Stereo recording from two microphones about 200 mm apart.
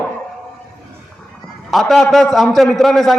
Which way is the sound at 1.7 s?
Centre (ahead or behind).